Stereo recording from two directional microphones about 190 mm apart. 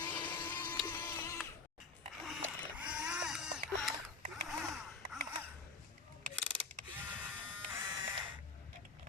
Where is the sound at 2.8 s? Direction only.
5° right (ahead or behind).